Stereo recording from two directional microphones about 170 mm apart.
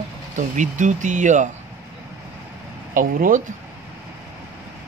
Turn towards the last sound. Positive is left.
turn(degrees=-50)  # may be behind; listen again after turning